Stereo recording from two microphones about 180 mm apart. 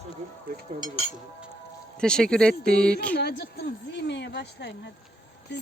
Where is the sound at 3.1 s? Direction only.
65° left (ahead or behind).